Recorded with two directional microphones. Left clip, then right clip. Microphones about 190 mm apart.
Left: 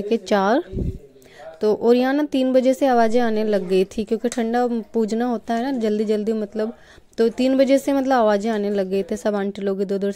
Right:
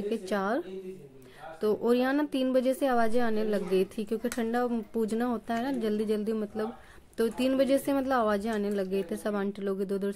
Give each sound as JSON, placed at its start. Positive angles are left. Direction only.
{"t": 0.1, "sound": "a woman's voice", "side_deg": 40}